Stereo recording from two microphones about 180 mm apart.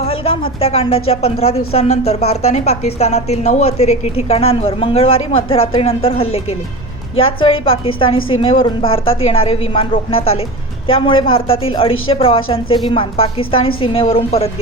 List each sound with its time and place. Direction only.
0.0 s a woman's voice: 30° left (ahead or behind)